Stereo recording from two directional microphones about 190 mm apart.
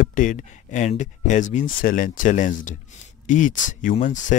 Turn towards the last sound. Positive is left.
turn(degrees=40)  # may be behind; listen again after turning